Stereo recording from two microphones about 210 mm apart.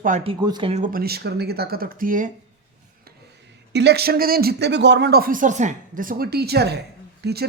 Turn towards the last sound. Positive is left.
turn(degrees=-50)  # may be behind; listen again after turning